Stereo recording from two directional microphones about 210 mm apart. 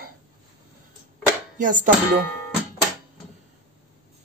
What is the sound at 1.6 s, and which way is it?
Speech, 40° right (ahead or behind).